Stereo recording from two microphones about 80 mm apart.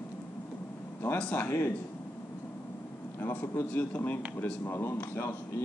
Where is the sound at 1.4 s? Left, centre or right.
Left.